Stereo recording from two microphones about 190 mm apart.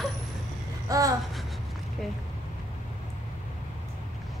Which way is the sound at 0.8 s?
20° right (ahead or behind).